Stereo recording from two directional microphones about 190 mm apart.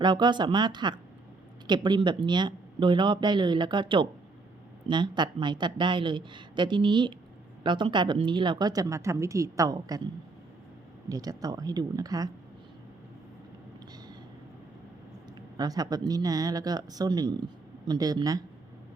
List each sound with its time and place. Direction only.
0.0 s speech: 25° right (ahead or behind)
11.1 s speech: 20° right (ahead or behind)
15.5 s speech: 20° right (ahead or behind)